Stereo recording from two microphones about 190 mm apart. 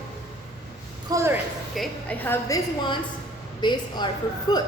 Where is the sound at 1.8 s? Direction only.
10° left (ahead or behind).